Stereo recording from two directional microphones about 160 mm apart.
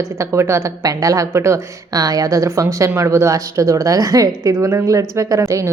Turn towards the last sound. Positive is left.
turn(degrees=-20)  # may be behind; listen again after turning